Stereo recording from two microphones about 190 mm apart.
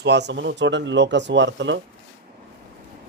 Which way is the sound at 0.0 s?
65° right (ahead or behind).